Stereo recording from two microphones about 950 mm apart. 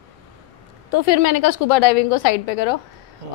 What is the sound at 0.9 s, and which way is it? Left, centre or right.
A woman's voice, left.